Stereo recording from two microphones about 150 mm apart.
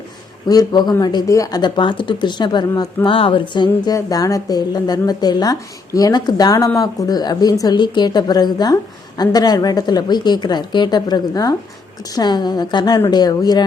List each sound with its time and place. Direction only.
0.4 s speech: 25° left (ahead or behind)